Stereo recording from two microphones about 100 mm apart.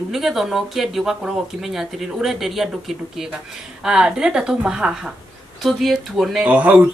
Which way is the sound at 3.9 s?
5° right (ahead or behind).